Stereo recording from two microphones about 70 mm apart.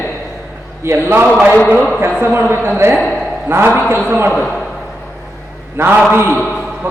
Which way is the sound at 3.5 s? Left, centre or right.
Right.